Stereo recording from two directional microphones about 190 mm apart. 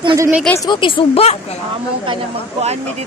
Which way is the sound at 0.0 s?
25° right (ahead or behind).